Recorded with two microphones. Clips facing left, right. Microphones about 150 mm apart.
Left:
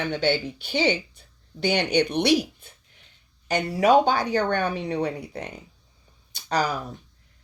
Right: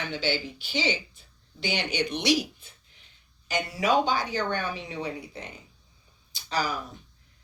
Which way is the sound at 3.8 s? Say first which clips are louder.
Left 6 dB; 50° left (ahead or behind).